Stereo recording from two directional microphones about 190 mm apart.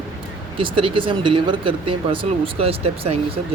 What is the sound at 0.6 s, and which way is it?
Speech, 25° right (ahead or behind).